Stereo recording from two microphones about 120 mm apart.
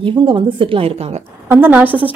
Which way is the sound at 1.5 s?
15° right (ahead or behind).